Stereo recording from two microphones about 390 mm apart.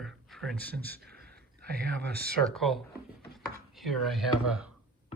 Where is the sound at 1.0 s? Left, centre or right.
Right.